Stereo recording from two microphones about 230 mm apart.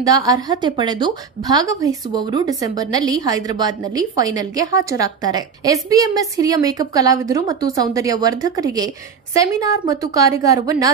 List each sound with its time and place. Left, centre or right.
0.0 s a woman's voice: centre